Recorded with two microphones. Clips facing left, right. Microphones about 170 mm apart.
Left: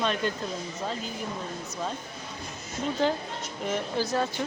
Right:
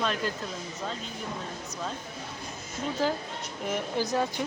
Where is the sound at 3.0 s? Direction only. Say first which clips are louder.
Left 2 dB; 5° right (ahead or behind).